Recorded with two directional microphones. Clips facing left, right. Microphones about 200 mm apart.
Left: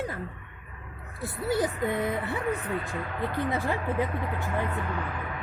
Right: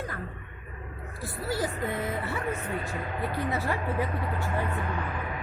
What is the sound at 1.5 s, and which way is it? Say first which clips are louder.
Speech: left 4 dB; 20° left (ahead or behind).